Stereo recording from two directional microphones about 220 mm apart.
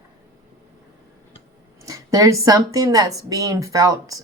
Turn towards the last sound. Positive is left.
turn(degrees=-15)  # may be behind; listen again after turning